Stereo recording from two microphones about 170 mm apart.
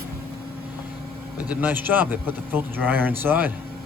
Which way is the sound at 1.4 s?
10° right (ahead or behind).